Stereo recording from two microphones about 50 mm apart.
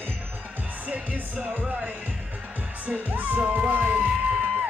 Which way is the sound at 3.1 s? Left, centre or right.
Right.